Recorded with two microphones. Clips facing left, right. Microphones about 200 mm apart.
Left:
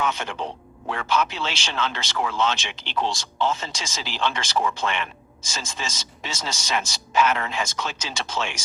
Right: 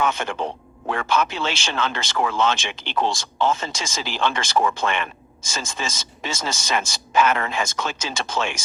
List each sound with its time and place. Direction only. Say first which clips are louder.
0.0 s speech: right 3 dB; 50° right (ahead or behind)